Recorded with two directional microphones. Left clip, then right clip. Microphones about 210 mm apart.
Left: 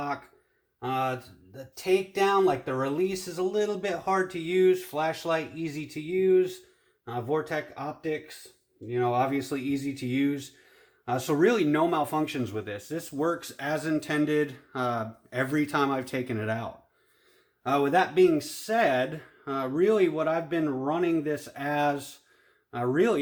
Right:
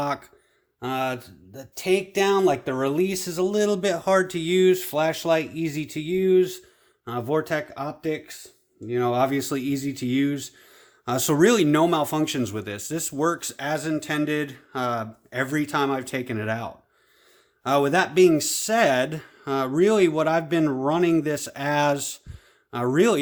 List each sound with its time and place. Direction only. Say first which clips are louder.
0.8 s speech: right 2 dB; 55° right (ahead or behind); by 16.6 s 20° right (ahead or behind)
17.6 s speech: right 3 dB; 40° right (ahead or behind)